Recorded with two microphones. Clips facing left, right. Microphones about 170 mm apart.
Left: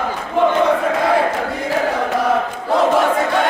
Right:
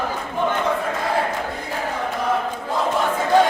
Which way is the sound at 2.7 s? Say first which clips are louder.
Left 8 dB; 75° left (ahead or behind).